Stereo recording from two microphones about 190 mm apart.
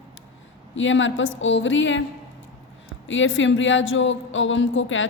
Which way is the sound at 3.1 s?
80° left.